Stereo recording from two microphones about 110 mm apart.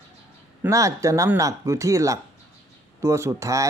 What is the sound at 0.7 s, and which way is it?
Speech, 30° right (ahead or behind).